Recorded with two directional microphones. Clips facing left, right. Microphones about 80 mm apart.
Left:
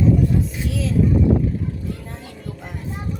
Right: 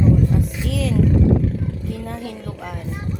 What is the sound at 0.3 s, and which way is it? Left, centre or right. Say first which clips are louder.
Vehicle: even; right.